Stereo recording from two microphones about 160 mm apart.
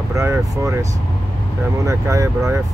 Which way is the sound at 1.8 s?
20° right (ahead or behind).